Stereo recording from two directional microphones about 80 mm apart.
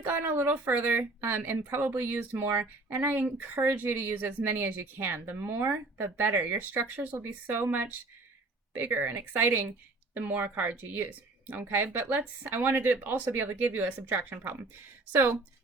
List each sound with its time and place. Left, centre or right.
0.0 s speech: right